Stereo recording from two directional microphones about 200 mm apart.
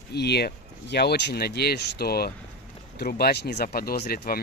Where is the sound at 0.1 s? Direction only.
55° left (ahead or behind).